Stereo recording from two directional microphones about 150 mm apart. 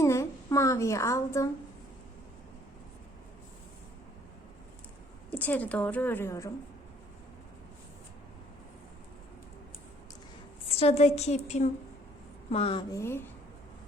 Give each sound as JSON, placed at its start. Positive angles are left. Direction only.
{"t": 0.0, "sound": "a woman's voice", "side_deg": 20}
{"t": 5.3, "sound": "a woman's voice", "side_deg": 10}
{"t": 10.8, "sound": "a woman's voice", "side_deg": 45}
{"t": 12.9, "sound": "a woman's voice", "side_deg": 15}